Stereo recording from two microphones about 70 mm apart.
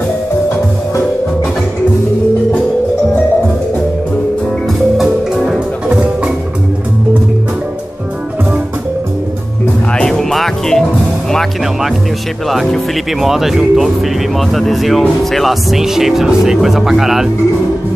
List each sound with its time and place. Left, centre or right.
4.9 s music: centre
5.9 s music: centre
9.9 s music: centre
12.4 s speech: centre